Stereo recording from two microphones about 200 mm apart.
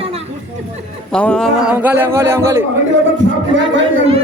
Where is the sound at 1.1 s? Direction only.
5° left (ahead or behind).